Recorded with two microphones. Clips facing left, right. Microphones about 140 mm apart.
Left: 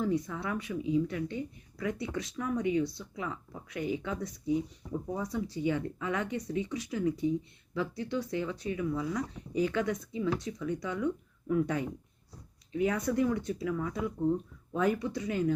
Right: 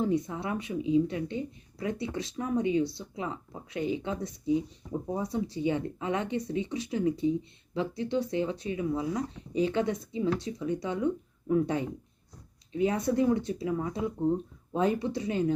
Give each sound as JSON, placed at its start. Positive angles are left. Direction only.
{"t": 0.0, "sound": "speech", "side_deg": -20}